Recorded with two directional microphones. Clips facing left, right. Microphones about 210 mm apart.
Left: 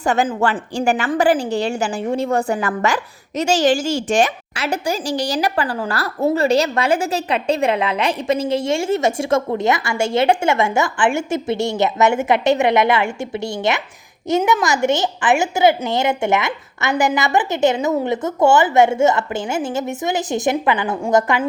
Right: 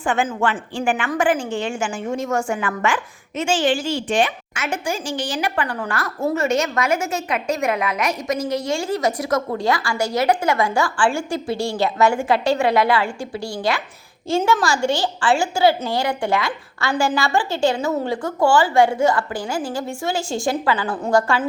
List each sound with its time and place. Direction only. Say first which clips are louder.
0.0 s a woman's voice: left 3 dB; 40° left (ahead or behind); by 21.4 s 20° left (ahead or behind)